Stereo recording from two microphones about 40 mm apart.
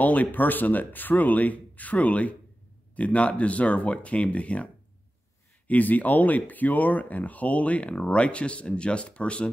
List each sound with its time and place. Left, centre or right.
0.0 s speech: left
5.7 s speech: left